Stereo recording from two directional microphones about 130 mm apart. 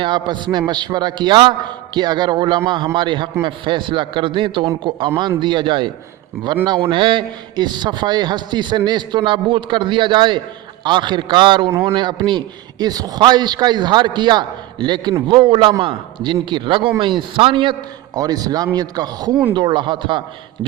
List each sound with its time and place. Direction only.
0.0 s a man's voice: 35° right (ahead or behind)
11.7 s a man's voice: 20° right (ahead or behind)
11.9 s a man's voice: 35° right (ahead or behind)